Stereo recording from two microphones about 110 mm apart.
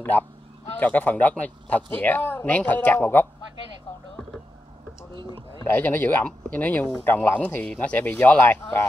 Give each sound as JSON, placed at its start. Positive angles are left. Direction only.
{"t": 0.1, "sound": "speech", "side_deg": 15}
{"t": 5.6, "sound": "speech", "side_deg": 20}